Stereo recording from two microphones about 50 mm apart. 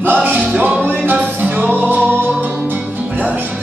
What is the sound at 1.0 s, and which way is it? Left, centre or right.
Music, right.